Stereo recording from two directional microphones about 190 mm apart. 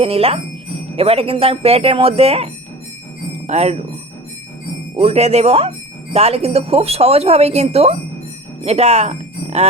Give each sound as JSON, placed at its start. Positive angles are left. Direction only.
{"t": 0.0, "sound": "speech", "side_deg": -30}
{"t": 4.9, "sound": "speech", "side_deg": -35}